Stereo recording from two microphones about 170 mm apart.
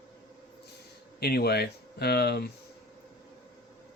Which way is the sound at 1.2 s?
70° left (ahead or behind).